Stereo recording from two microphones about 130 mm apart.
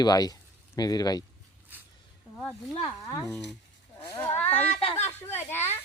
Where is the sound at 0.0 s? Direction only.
30° left (ahead or behind).